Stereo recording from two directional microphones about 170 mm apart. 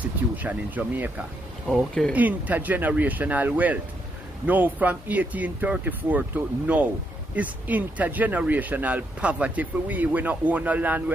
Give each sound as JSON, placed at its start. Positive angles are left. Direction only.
{"t": 0.4, "sound": "speech", "side_deg": -10}
{"t": 1.7, "sound": "speech", "side_deg": 0}
{"t": 2.1, "sound": "speech", "side_deg": -10}